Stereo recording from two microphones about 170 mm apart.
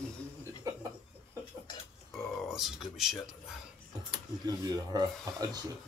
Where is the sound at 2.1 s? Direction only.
Centre (ahead or behind).